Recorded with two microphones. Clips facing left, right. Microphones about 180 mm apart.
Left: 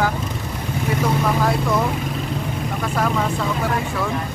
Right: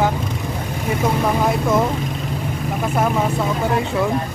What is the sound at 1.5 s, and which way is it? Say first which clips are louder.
Speech: right 2 dB; 20° right (ahead or behind).